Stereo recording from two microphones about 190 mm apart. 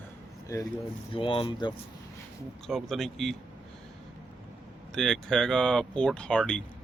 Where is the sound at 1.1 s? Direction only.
30° left (ahead or behind).